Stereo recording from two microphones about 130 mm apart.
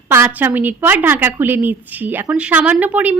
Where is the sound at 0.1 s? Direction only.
15° right (ahead or behind).